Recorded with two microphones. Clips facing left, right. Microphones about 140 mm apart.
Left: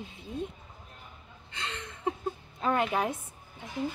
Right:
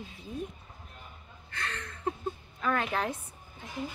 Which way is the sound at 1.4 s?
20° left (ahead or behind).